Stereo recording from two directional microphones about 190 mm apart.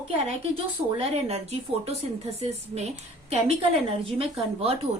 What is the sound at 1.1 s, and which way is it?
Speech, 35° right (ahead or behind).